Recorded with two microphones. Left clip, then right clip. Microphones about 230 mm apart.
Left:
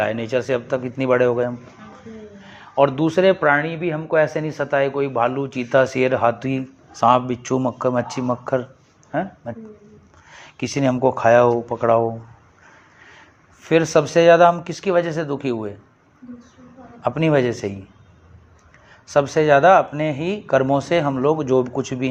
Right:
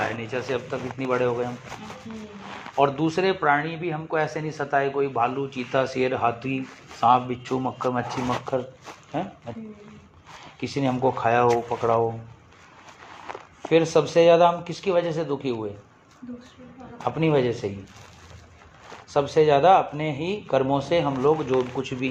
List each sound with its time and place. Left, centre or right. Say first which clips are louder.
0.0 s speech: left 7 dB; left
2.7 s speech: left 5 dB; left
9.2 s speech: left 6 dB; left
10.6 s speech: left 5 dB; left
13.6 s speech: left 3 dB; left
17.0 s speech: left 4 dB; left
19.0 s speech: left 3 dB; left